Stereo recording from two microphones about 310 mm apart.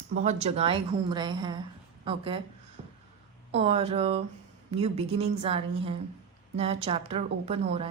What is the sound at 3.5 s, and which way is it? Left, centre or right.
Speech, centre.